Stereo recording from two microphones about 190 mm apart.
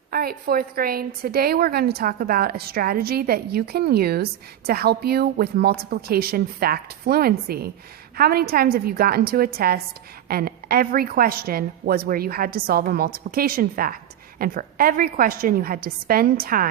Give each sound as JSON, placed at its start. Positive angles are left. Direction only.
{"t": 0.1, "sound": "a woman's voice", "side_deg": -50}